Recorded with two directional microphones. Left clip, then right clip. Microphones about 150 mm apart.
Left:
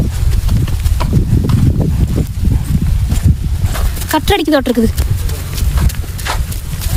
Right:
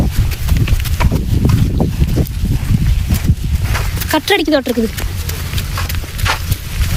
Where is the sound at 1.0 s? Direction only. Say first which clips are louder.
Right 2 dB; centre (ahead or behind).